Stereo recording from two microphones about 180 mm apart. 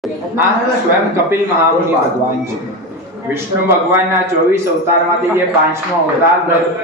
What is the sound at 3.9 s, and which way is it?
A man's voice, 15° right (ahead or behind).